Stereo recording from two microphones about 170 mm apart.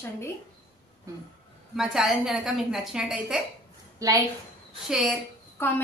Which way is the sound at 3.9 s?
20° right (ahead or behind).